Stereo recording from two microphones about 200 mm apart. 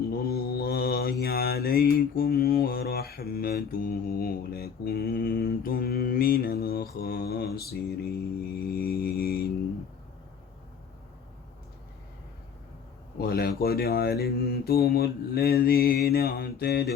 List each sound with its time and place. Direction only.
0.3 s mantra: 50° left (ahead or behind)
13.1 s a sound: 50° left (ahead or behind)
13.6 s mantra: 50° left (ahead or behind)